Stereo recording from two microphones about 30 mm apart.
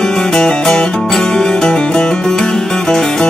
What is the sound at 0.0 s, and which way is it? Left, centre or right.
Music, left.